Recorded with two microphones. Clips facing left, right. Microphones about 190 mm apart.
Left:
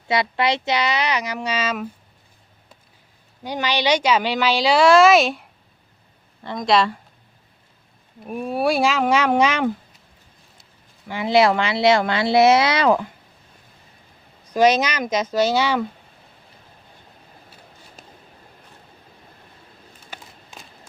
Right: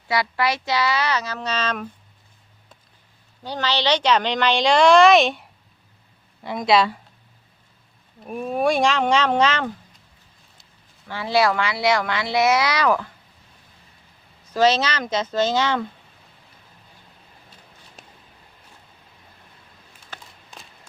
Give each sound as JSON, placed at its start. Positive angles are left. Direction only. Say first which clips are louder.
{"t": 0.1, "sound": "speech", "louder": "left 2 dB", "side_deg": 20}
{"t": 3.4, "sound": "speech", "louder": "left 1 dB", "side_deg": 15}
{"t": 6.4, "sound": "speech", "louder": "even", "side_deg": -10}
{"t": 8.2, "sound": "speech", "louder": "even", "side_deg": 0}
{"t": 11.1, "sound": "speech", "louder": "left 3 dB", "side_deg": 20}
{"t": 14.5, "sound": "speech", "louder": "left 2 dB", "side_deg": 15}
{"t": 18.0, "sound": "a sound", "louder": "left 1 dB", "side_deg": 0}
{"t": 20.1, "sound": "a sound", "louder": "left 1 dB", "side_deg": 10}